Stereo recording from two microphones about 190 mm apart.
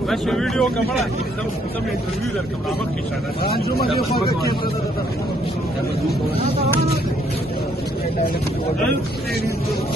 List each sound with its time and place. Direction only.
0.1 s speech: centre (ahead or behind)
3.4 s speech: 55° left (ahead or behind)